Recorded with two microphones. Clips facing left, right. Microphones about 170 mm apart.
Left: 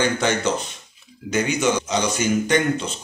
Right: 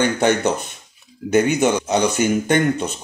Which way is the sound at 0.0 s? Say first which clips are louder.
Right 4 dB; 55° right (ahead or behind).